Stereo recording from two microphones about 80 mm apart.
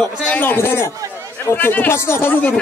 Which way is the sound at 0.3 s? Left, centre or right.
Left.